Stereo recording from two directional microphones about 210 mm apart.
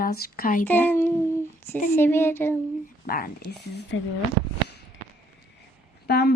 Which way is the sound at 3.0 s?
45° left (ahead or behind).